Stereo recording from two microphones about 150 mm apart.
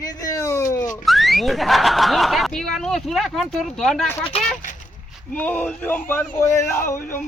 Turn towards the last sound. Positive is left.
turn(degrees=15)  # may be behind; listen again after turning